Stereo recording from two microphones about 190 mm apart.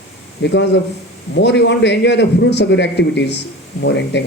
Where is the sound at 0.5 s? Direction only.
65° left (ahead or behind).